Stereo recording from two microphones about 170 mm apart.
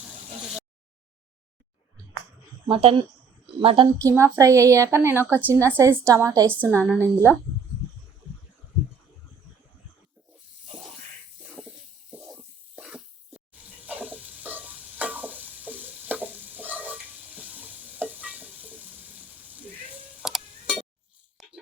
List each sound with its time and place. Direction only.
2.6 s speech: 30° right (ahead or behind)
4.1 s a woman's voice: 15° right (ahead or behind)
11.4 s a sound: 5° right (ahead or behind)
12.1 s spray: 5° right (ahead or behind)
13.8 s stir: 10° right (ahead or behind)
18.6 s water: 10° right (ahead or behind)
20.2 s tick-tock: centre (ahead or behind)
21.4 s a sound: centre (ahead or behind)